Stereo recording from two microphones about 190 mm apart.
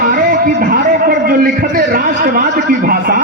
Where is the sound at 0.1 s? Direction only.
50° right (ahead or behind).